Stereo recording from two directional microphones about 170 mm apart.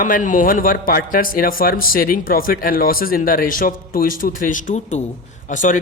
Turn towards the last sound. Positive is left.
turn(degrees=50)  # may be behind; listen again after turning